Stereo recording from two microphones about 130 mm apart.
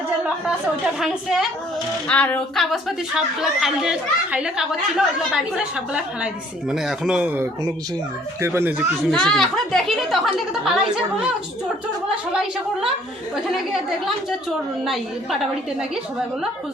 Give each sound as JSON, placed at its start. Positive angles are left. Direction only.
{"t": 0.9, "sound": "speech", "side_deg": 0}
{"t": 2.0, "sound": "a sound", "side_deg": 10}
{"t": 3.2, "sound": "speech", "side_deg": -5}
{"t": 9.0, "sound": "speech", "side_deg": 5}
{"t": 12.1, "sound": "speech", "side_deg": -5}
{"t": 14.8, "sound": "speech", "side_deg": 0}